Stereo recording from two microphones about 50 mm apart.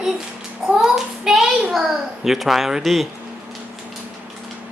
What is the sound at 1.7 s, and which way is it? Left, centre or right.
A child's voice, centre.